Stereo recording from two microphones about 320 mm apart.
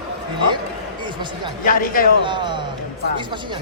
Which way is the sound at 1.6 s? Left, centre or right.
Left.